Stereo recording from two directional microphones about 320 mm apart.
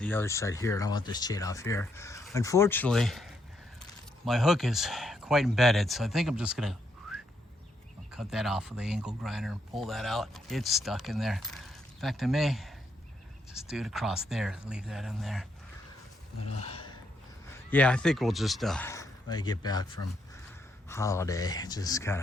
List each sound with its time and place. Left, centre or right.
0.0 s speech: centre
16.6 s a sound: centre
17.5 s speech: centre